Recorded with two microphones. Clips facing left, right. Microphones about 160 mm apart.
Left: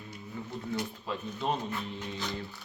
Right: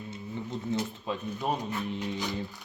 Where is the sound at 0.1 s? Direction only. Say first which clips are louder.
Right 3 dB; 20° right (ahead or behind).